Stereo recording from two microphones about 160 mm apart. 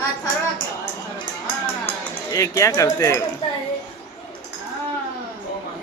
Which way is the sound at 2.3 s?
20° left (ahead or behind).